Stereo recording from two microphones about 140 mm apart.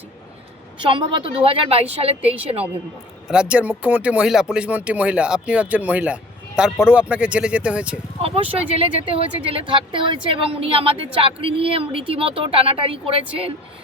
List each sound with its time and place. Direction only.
0.8 s speech: 40° right (ahead or behind)
3.2 s speech: 5° right (ahead or behind)
8.2 s speech: 45° right (ahead or behind)